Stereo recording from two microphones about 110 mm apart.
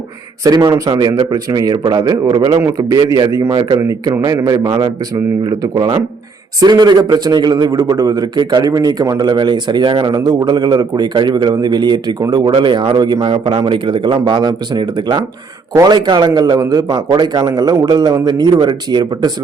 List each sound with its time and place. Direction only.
0.4 s a man's voice: 35° right (ahead or behind)
12.5 s a man's voice: 55° right (ahead or behind)